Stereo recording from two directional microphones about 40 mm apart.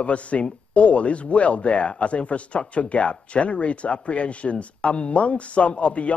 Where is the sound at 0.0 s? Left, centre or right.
Left.